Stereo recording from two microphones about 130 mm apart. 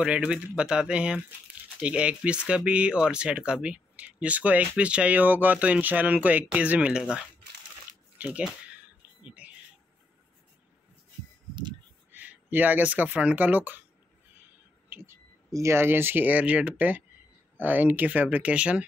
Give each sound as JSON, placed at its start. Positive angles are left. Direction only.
{"t": 0.0, "sound": "speech", "side_deg": -10}
{"t": 9.2, "sound": "bird", "side_deg": -10}
{"t": 12.1, "sound": "speech", "side_deg": -15}
{"t": 14.9, "sound": "speech", "side_deg": -20}